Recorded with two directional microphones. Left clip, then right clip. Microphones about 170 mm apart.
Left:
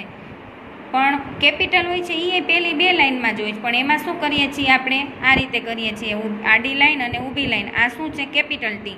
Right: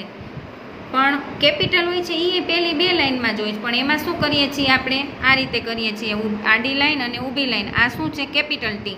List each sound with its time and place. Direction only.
0.9 s a woman's voice: 25° right (ahead or behind)